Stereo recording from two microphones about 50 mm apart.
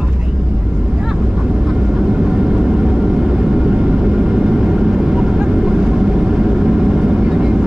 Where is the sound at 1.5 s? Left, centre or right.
Centre.